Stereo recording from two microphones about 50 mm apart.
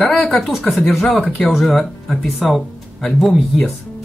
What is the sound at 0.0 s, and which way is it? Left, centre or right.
Speech, left.